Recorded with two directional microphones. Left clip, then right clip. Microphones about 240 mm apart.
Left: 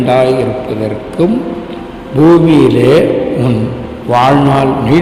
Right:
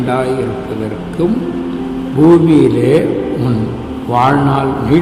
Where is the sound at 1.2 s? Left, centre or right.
Left.